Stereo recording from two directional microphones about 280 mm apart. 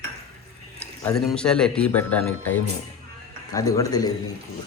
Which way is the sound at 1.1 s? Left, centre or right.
Centre.